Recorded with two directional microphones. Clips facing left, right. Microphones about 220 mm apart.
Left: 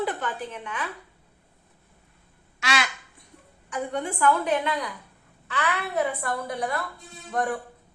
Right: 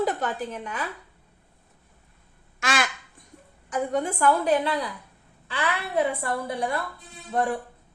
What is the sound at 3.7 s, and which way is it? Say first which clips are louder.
A woman's voice: right 3 dB; 40° right (ahead or behind).